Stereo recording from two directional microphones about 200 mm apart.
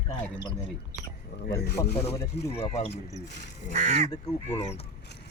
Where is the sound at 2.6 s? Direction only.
30° left (ahead or behind).